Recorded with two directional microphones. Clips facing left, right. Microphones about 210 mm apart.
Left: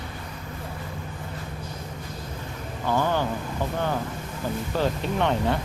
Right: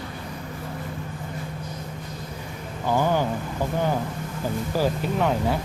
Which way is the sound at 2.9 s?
10° right (ahead or behind).